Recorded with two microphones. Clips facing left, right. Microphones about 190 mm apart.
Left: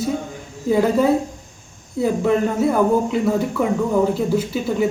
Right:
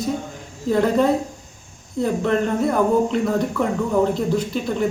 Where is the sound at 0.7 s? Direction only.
5° left (ahead or behind).